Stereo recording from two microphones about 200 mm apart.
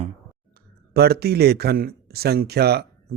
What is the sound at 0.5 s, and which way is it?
Speech, 50° right (ahead or behind).